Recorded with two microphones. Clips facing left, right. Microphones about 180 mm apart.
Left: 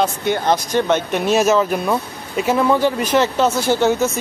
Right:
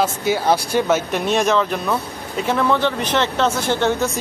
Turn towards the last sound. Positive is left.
turn(degrees=5)  # may be behind; listen again after turning